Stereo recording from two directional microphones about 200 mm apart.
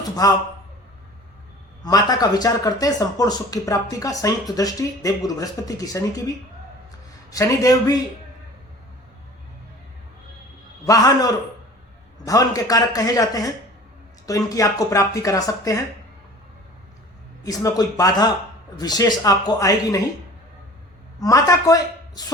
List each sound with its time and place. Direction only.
0.0 s a sound: 20° left (ahead or behind)
1.8 s speech: 20° left (ahead or behind)
10.8 s speech: 20° left (ahead or behind)
17.4 s speech: 15° left (ahead or behind)
21.2 s a man's voice: 15° left (ahead or behind)